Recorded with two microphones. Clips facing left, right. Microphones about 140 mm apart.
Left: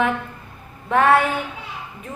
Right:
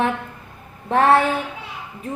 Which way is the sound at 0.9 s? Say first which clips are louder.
Right 1 dB; 30° right (ahead or behind).